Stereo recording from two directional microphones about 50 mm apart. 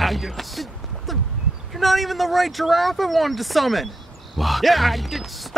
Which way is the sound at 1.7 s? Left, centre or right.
Centre.